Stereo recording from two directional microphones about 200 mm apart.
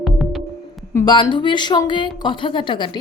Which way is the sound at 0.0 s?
Centre (ahead or behind).